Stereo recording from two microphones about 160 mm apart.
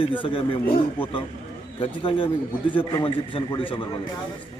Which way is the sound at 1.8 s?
30° left (ahead or behind).